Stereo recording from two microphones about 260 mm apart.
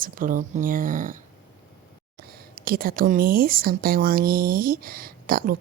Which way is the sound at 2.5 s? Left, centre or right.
Right.